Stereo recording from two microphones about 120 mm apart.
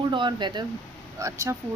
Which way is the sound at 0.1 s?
40° right (ahead or behind).